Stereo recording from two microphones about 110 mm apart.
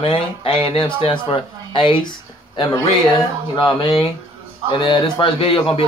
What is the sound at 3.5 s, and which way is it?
A man's voice, 45° left (ahead or behind).